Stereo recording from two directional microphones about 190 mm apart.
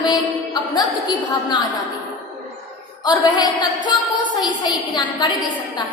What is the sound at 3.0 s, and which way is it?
A woman's voice, 20° left (ahead or behind).